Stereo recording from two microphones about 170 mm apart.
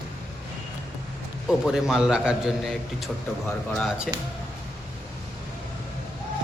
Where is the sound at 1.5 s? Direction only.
5° right (ahead or behind).